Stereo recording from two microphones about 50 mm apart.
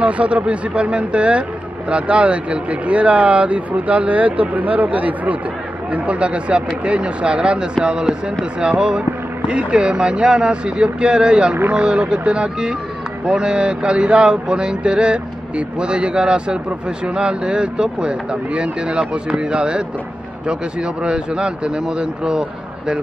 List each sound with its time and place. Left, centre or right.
0.0 s speech: right